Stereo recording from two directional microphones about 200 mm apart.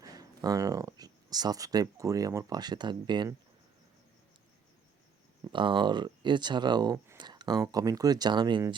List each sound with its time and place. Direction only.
0.0 s speech: 20° right (ahead or behind)
5.5 s speech: 25° right (ahead or behind)